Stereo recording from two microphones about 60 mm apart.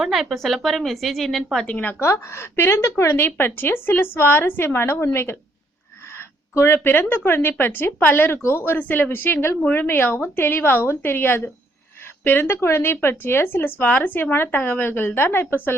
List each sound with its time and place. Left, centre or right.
0.0 s speech: centre
1.6 s speech: left
2.0 s speech: left
6.5 s speech: left
6.7 s speech: left